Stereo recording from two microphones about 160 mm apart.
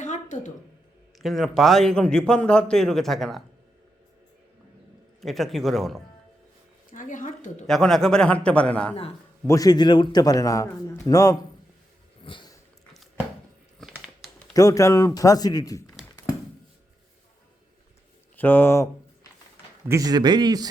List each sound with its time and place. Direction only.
0.0 s a sound: 50° left (ahead or behind)
1.2 s a man's voice: centre (ahead or behind)
5.2 s a man's voice: centre (ahead or behind)
6.9 s speech: 55° left (ahead or behind)
7.7 s a man's voice: centre (ahead or behind)
9.5 s a man's voice: 25° left (ahead or behind)
12.2 s a sound: 30° left (ahead or behind)
13.8 s crumpling: centre (ahead or behind)
14.5 s a man's voice: 20° left (ahead or behind)
18.3 s speech: 10° left (ahead or behind)
19.9 s speech: 25° right (ahead or behind)